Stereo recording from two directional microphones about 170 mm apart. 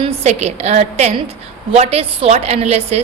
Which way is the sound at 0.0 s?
40° right (ahead or behind).